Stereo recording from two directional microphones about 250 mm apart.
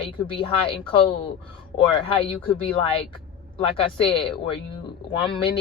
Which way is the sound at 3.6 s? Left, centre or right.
Left.